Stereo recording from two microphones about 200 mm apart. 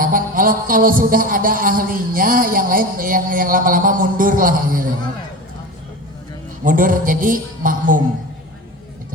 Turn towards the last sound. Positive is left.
turn(degrees=-40)  # may be behind; listen again after turning